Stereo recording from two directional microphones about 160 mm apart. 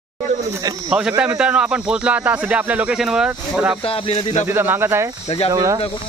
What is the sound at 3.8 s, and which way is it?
Speech, 35° left (ahead or behind).